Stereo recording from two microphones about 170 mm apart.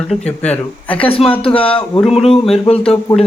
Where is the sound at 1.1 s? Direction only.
35° left (ahead or behind).